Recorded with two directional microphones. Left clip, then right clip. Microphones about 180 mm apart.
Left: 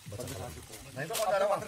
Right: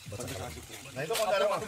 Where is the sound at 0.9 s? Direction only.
15° right (ahead or behind).